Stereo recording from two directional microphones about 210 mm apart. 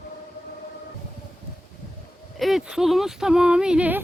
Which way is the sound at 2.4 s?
Centre (ahead or behind).